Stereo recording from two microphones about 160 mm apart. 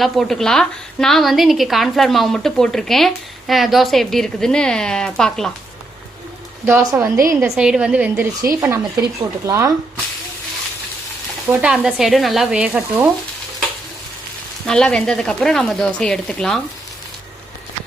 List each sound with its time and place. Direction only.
0.0 s a woman's voice: centre (ahead or behind)
6.7 s a woman's voice: 15° right (ahead or behind)
7.5 s a woman's voice: 5° right (ahead or behind); by 9.7 s 20° right (ahead or behind)
11.4 s a woman's voice: 5° right (ahead or behind)
14.7 s a woman's voice: 5° left (ahead or behind)